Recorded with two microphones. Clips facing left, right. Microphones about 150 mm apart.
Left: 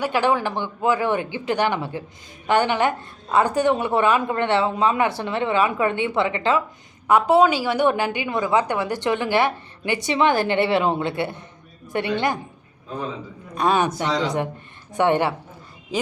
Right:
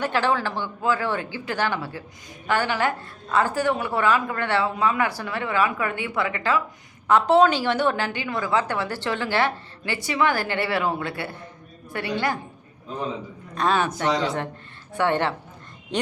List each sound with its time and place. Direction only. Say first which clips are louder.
0.0 s a woman's voice: left 2 dB; 15° left (ahead or behind)
7.1 s a woman's voice: left 1 dB; 10° left (ahead or behind)
13.6 s a woman's voice: left 2 dB; 15° left (ahead or behind)